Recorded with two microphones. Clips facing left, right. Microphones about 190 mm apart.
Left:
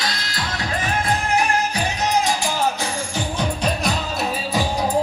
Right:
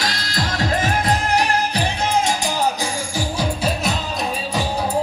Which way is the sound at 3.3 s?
5° right (ahead or behind).